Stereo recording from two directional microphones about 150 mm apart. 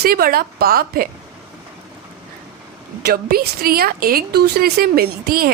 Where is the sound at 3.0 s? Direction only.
90° right.